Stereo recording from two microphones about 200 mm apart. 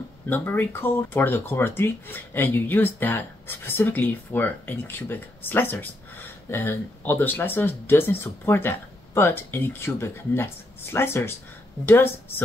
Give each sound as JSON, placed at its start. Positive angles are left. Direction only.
{"t": 0.3, "sound": "speech", "side_deg": 10}